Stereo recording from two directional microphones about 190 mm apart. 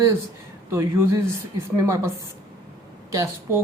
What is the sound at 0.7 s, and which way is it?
Speech, 15° right (ahead or behind).